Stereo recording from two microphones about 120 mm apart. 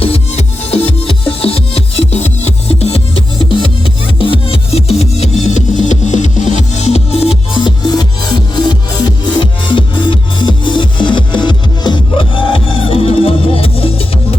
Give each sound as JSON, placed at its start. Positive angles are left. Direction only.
{"t": 0.0, "sound": "music", "side_deg": 55}
{"t": 9.0, "sound": "music", "side_deg": 40}